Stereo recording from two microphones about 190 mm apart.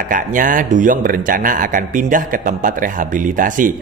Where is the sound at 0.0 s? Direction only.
45° right (ahead or behind).